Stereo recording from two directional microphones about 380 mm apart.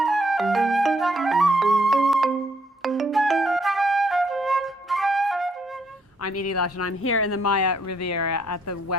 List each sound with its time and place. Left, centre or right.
0.0 s flute: centre
2.8 s music: centre
6.2 s speech: left